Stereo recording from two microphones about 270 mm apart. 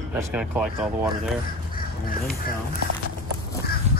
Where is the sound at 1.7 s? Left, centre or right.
Left.